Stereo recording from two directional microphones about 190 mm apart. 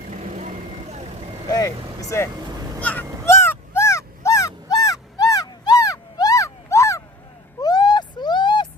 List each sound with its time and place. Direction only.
0.1 s vehicle: 40° right (ahead or behind)
1.5 s speech: 20° left (ahead or behind)
2.3 s vehicle: 20° right (ahead or behind)
2.8 s speech: 10° left (ahead or behind)
3.2 s a sound: 15° left (ahead or behind)